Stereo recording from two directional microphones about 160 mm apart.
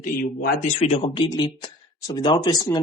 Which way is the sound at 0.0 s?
65° left (ahead or behind).